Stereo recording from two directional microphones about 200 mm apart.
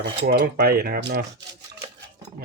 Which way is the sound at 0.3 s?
50° right (ahead or behind).